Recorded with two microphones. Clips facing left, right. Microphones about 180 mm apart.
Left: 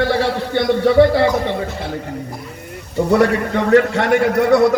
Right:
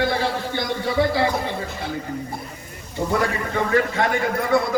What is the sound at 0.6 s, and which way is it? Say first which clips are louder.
Speech: left 11 dB; 60° left (ahead or behind).